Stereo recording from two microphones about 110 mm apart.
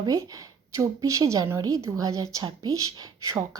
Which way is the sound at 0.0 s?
35° right (ahead or behind).